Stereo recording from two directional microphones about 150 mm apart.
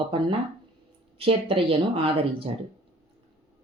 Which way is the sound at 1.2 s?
35° right (ahead or behind).